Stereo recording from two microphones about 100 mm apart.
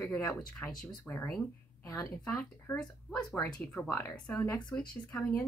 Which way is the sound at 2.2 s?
10° left (ahead or behind).